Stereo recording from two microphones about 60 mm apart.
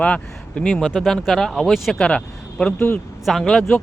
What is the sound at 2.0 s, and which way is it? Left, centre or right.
Speech, centre.